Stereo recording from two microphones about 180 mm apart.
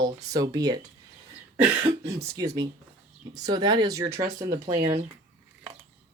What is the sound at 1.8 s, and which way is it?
Speech, 20° right (ahead or behind).